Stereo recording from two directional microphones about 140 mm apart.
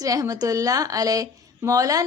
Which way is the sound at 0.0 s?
25° right (ahead or behind).